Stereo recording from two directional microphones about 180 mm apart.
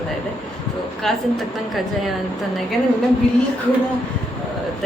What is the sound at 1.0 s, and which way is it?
Speech, centre (ahead or behind).